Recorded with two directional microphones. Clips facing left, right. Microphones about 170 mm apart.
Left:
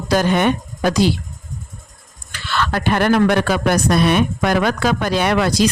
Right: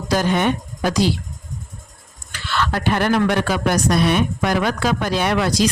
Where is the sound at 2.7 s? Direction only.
60° left (ahead or behind).